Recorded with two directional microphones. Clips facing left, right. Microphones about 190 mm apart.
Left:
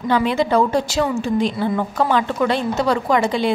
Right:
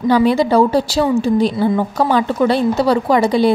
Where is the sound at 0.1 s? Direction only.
35° right (ahead or behind).